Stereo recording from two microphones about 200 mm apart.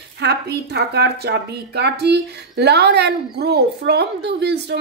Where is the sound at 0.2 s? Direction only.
55° right (ahead or behind).